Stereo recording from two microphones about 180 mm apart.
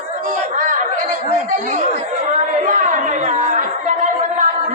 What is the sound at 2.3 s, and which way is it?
Chatter, 45° right (ahead or behind).